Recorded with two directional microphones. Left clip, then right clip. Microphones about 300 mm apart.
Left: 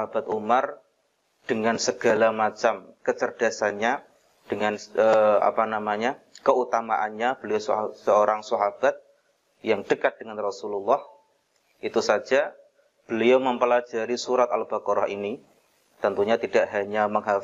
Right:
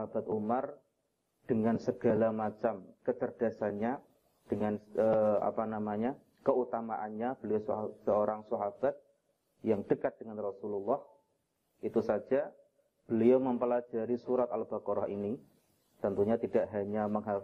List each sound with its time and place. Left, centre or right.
0.0 s a man's voice: centre
10.5 s speech: left
11.8 s a man's voice: centre